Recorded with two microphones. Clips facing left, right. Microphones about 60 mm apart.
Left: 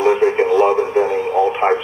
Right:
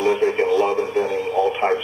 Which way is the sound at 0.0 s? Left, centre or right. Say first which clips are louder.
Left 4 dB; left.